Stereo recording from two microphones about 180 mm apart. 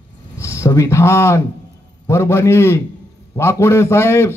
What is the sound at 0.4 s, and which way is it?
A man's voice, 15° left (ahead or behind).